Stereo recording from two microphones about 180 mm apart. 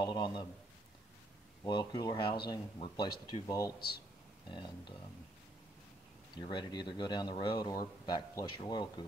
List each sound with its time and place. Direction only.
0.0 s speech: 25° left (ahead or behind)
1.6 s speech: 25° left (ahead or behind)
6.3 s speech: 25° left (ahead or behind)